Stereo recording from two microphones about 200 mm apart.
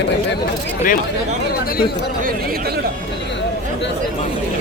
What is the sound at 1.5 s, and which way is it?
Speech, 50° left (ahead or behind).